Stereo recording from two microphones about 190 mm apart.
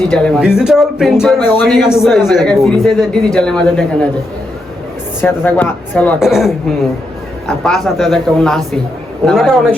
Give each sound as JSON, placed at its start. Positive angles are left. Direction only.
{"t": 0.1, "sound": "speech", "side_deg": 5}
{"t": 5.2, "sound": "speech", "side_deg": 10}
{"t": 6.1, "sound": "speech", "side_deg": 0}